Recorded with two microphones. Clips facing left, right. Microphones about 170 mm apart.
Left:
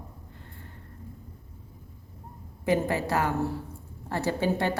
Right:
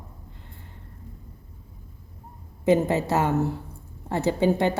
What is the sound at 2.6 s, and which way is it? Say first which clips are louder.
A woman's voice: right 5 dB; 20° right (ahead or behind).